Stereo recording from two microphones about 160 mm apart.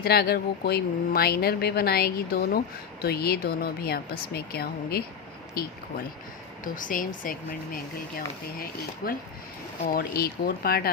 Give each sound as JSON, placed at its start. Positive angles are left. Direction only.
{"t": 0.0, "sound": "speech", "side_deg": 75}
{"t": 6.7, "sound": "speech", "side_deg": 55}
{"t": 9.9, "sound": "speech", "side_deg": 70}